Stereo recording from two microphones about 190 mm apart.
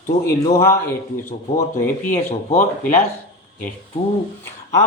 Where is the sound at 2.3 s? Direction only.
35° left (ahead or behind).